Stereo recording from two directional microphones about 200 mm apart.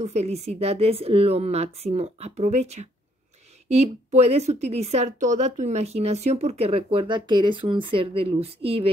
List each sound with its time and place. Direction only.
0.0 s a woman's voice: 30° right (ahead or behind)